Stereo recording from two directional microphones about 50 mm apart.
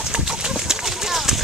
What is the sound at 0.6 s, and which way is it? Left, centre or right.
Clip-clop, centre.